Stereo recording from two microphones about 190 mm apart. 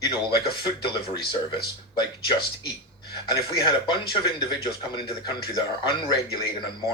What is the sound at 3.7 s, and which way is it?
A man's voice, 25° left (ahead or behind).